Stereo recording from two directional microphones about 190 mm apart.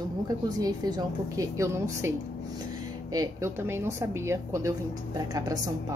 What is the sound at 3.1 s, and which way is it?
A woman's voice, 15° right (ahead or behind).